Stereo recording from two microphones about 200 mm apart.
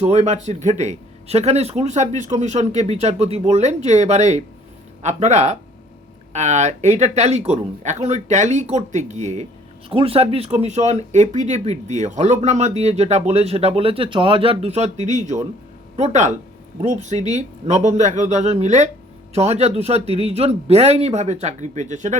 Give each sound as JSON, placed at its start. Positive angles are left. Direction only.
{"t": 0.0, "sound": "speech", "side_deg": -35}